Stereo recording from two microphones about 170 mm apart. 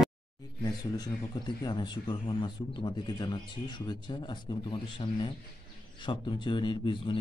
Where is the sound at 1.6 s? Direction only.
25° left (ahead or behind).